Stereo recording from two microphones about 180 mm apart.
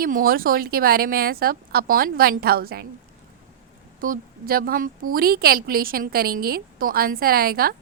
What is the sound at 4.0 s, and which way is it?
A woman's voice, 55° right (ahead or behind).